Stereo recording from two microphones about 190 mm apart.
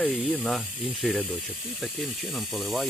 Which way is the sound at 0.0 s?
5° right (ahead or behind).